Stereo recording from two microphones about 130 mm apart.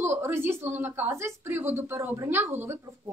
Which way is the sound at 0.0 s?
20° right (ahead or behind).